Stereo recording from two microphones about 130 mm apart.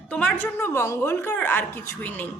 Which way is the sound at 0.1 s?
10° left (ahead or behind).